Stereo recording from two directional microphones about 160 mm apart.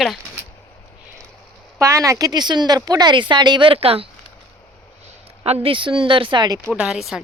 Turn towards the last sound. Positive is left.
turn(degrees=0)  # may be behind; listen again after turning